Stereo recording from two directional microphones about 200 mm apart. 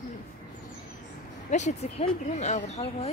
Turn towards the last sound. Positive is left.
turn(degrees=30)  # may be behind; listen again after turning